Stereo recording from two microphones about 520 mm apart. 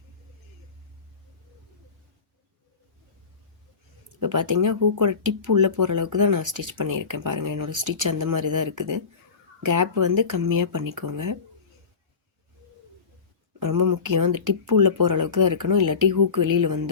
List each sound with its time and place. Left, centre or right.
4.1 s speech: right
13.6 s speech: right